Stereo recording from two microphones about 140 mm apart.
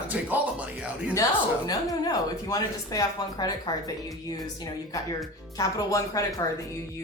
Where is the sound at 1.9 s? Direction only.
25° left (ahead or behind).